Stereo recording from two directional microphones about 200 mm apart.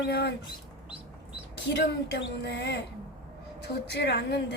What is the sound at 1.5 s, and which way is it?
A woman's voice, 60° left (ahead or behind).